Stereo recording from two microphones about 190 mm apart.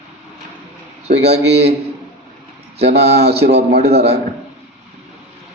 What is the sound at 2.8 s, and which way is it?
A man's voice, 60° right (ahead or behind).